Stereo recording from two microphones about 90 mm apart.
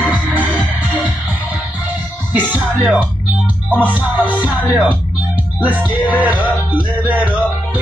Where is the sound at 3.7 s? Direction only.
20° right (ahead or behind).